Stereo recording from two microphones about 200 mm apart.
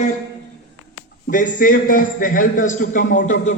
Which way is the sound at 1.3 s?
40° left (ahead or behind).